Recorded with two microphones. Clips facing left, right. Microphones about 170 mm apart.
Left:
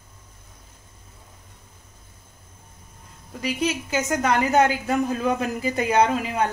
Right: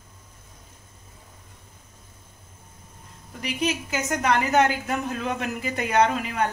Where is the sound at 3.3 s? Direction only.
30° left (ahead or behind).